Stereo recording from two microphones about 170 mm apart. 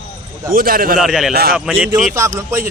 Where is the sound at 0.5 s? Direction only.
60° right (ahead or behind).